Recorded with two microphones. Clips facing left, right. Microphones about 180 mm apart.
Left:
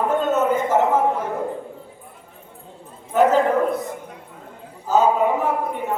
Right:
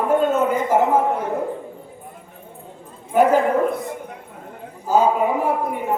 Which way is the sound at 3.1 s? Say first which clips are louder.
Right 1 dB; 10° right (ahead or behind).